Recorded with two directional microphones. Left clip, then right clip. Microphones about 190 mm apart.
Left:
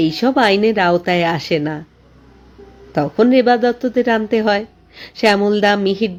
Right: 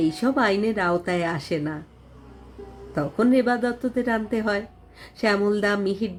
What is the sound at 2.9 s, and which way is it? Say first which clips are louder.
Speech: left 8 dB; 30° left (ahead or behind).